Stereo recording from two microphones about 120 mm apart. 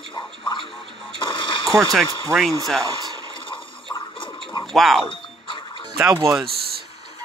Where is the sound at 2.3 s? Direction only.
5° left (ahead or behind).